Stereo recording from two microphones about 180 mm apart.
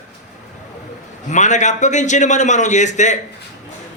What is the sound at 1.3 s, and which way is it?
A man's voice, 40° left (ahead or behind).